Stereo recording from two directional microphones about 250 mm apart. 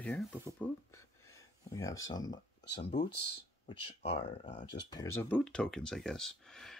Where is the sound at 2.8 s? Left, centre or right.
Left.